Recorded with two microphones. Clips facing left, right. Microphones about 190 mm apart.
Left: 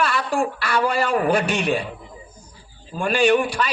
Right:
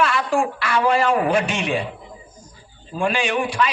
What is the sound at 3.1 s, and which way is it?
Speech, 35° left (ahead or behind).